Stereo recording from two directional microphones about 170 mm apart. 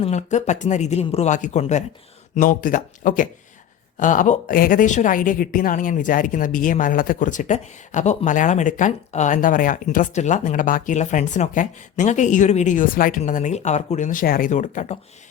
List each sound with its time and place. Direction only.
0.0 s a woman's voice: 40° left (ahead or behind)